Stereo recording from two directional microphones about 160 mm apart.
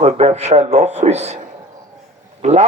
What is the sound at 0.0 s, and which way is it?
Music, 45° right (ahead or behind).